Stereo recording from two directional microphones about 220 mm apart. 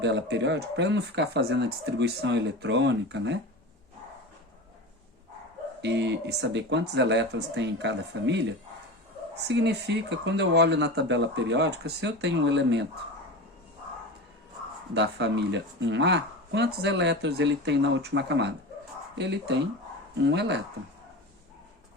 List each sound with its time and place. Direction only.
0.0 s speech: 50° right (ahead or behind)
5.8 s speech: 50° right (ahead or behind)
14.9 s speech: 50° right (ahead or behind)